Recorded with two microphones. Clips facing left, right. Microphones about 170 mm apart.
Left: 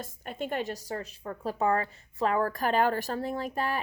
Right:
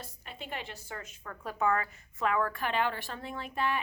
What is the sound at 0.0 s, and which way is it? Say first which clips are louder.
A woman's voice: left 9 dB; 50° left (ahead or behind).